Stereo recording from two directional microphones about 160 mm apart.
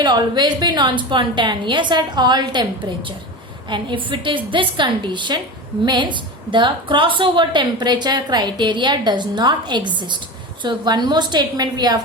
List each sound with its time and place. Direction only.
0.0 s a woman's voice: 25° right (ahead or behind)